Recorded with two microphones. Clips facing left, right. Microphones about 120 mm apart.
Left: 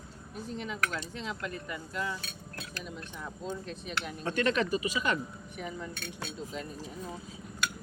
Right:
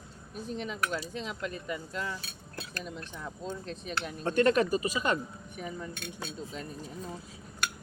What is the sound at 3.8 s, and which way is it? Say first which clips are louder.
Speech: right 2 dB; 35° right (ahead or behind).